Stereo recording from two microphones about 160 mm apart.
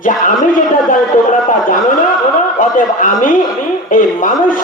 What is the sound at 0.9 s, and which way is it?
A man's voice, 55° left (ahead or behind).